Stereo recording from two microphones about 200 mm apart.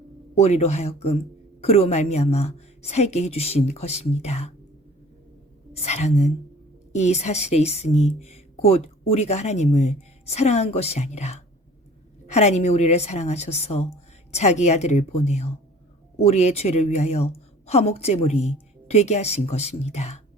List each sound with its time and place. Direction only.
0.3 s speech: 30° left (ahead or behind)
5.7 s speech: 35° left (ahead or behind)